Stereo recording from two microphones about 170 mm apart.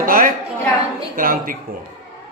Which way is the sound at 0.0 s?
55° right (ahead or behind).